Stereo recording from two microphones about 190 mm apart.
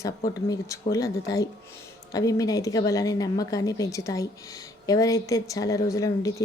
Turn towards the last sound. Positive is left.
turn(degrees=15)  # may be behind; listen again after turning